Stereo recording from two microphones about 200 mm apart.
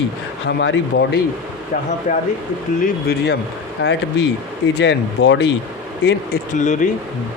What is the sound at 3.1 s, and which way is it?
Speech, 55° left (ahead or behind).